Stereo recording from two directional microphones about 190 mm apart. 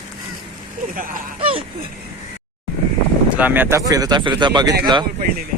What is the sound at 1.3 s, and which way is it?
Speech, 30° right (ahead or behind).